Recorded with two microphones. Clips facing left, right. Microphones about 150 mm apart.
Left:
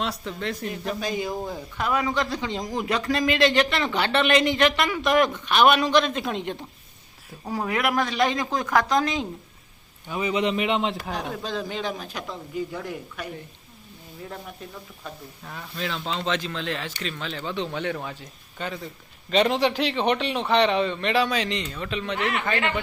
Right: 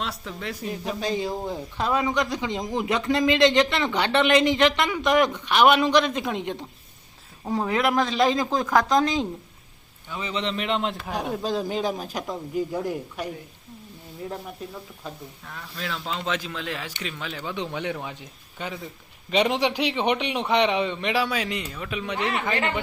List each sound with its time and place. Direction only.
0.0 s speech: centre (ahead or behind)
0.9 s speech: 30° right (ahead or behind)
7.6 s speech: centre (ahead or behind)
10.1 s speech: 15° left (ahead or behind); by 11.3 s 5° right (ahead or behind)
11.4 s speech: 40° right (ahead or behind)
15.5 s a man's voice: centre (ahead or behind); by 22.6 s 15° right (ahead or behind)